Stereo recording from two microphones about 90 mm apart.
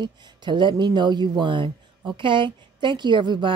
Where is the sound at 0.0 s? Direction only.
55° right (ahead or behind).